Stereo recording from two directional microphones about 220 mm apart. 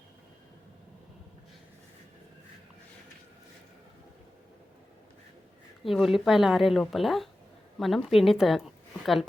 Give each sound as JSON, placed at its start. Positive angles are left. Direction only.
{"t": 5.8, "sound": "a woman's voice", "side_deg": 0}